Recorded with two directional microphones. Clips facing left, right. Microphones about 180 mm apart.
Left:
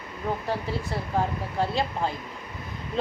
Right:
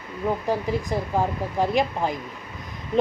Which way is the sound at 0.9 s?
15° right (ahead or behind).